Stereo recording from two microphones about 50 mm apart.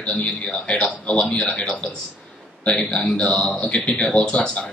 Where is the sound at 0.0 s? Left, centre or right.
Left.